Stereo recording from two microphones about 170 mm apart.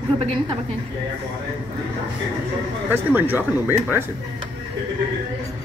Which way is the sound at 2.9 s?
10° right (ahead or behind).